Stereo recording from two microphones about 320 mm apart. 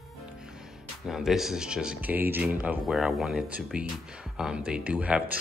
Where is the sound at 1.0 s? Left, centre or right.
Centre.